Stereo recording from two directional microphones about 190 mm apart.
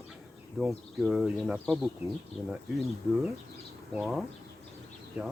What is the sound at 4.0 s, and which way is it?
Speech, centre (ahead or behind).